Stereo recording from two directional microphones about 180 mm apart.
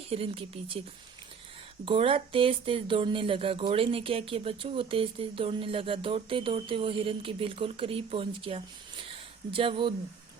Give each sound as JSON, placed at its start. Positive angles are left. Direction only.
{"t": 0.1, "sound": "speech", "side_deg": -30}
{"t": 1.8, "sound": "speech", "side_deg": -30}